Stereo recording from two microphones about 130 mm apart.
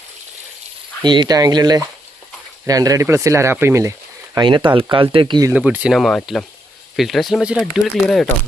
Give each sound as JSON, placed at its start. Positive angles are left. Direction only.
{"t": 1.0, "sound": "speech", "side_deg": -35}
{"t": 4.4, "sound": "speech", "side_deg": -35}
{"t": 5.5, "sound": "speech", "side_deg": -10}
{"t": 6.0, "sound": "speech", "side_deg": 0}